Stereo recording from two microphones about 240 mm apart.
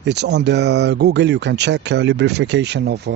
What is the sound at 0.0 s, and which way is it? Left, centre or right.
Speech, right.